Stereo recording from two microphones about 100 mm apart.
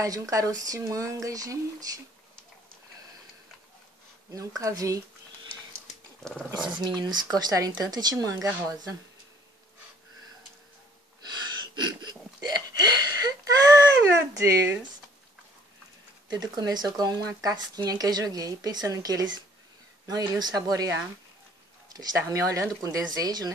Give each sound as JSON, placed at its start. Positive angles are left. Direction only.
{"t": 0.0, "sound": "speech", "side_deg": -35}
{"t": 4.3, "sound": "speech", "side_deg": -35}
{"t": 6.8, "sound": "speech", "side_deg": -45}
{"t": 11.7, "sound": "a sound", "side_deg": -45}
{"t": 16.3, "sound": "speech", "side_deg": -45}